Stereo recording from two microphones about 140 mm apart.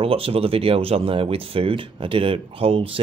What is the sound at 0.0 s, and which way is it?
Speech, 40° right (ahead or behind).